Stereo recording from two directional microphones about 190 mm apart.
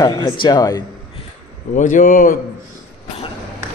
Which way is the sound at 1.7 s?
40° left (ahead or behind).